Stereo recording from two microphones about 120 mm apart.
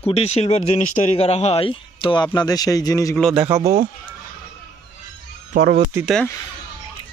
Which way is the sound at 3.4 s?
25° right (ahead or behind).